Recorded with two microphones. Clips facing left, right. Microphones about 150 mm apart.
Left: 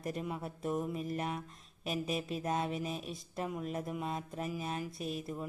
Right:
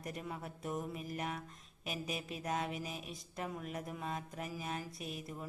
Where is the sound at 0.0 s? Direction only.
25° left (ahead or behind).